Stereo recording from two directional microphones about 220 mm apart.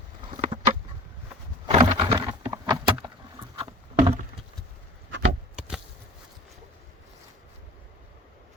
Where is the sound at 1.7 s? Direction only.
25° right (ahead or behind).